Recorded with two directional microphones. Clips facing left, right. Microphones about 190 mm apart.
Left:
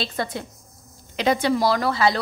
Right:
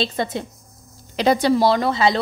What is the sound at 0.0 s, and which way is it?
Speech, 20° right (ahead or behind).